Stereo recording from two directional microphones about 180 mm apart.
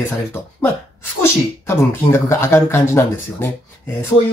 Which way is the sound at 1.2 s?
15° left (ahead or behind).